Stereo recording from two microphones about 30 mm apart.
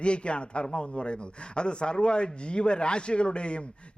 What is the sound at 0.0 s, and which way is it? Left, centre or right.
A man's voice, left.